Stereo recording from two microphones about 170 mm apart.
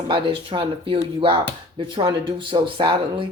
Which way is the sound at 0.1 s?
30° right (ahead or behind).